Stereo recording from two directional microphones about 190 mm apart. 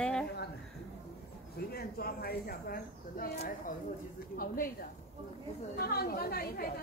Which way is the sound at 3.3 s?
35° left (ahead or behind).